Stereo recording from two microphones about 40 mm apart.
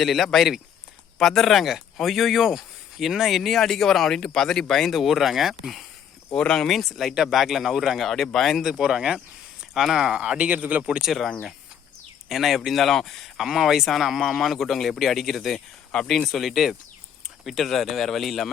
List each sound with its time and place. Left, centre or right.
0.0 s speech: centre
4.9 s speech: centre
6.3 s speech: centre
6.7 s speech: centre
8.0 s speech: centre
8.8 s speech: centre
10.1 s speech: right
10.5 s speech: right
12.3 s speech: centre
13.4 s speech: centre